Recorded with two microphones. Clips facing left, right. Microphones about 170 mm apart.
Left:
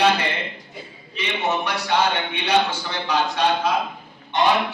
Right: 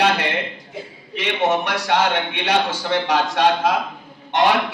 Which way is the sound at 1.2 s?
90° right.